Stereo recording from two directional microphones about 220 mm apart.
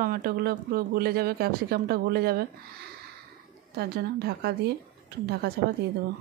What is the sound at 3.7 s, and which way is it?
Speech, 45° right (ahead or behind).